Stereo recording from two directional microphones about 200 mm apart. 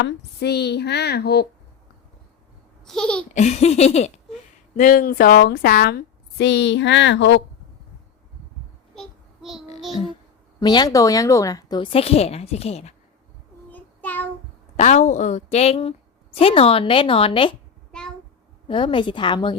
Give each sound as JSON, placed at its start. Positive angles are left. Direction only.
{"t": 0.0, "sound": "a woman's voice", "side_deg": 55}
{"t": 2.8, "sound": "speech", "side_deg": 5}
{"t": 3.3, "sound": "a sound", "side_deg": 35}
{"t": 4.8, "sound": "a woman's voice", "side_deg": 40}
{"t": 9.0, "sound": "child singing", "side_deg": 0}
{"t": 10.6, "sound": "a woman's voice", "side_deg": 20}
{"t": 13.7, "sound": "child singing", "side_deg": 10}
{"t": 14.8, "sound": "a woman's voice", "side_deg": 35}
{"t": 18.7, "sound": "a woman's voice", "side_deg": 25}